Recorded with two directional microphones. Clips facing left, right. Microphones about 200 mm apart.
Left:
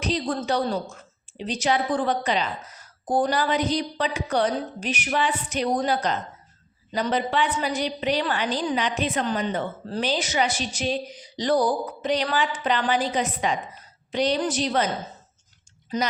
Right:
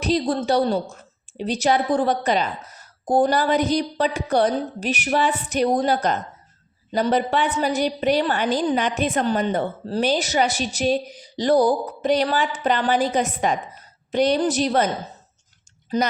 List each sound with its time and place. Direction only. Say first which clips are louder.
0.1 s a woman's voice: right 6 dB; 35° right (ahead or behind)